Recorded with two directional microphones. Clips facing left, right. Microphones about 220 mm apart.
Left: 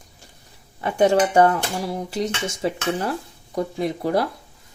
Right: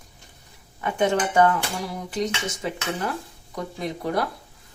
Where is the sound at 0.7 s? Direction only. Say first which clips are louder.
Left 5 dB; 35° left (ahead or behind).